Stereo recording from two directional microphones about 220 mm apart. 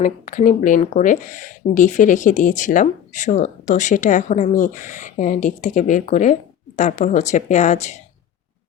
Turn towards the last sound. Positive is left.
turn(degrees=30)  # may be behind; listen again after turning